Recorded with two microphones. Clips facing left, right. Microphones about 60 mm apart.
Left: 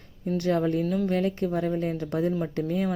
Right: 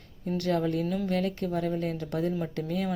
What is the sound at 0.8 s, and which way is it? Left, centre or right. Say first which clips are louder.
Speech: left 3 dB; centre.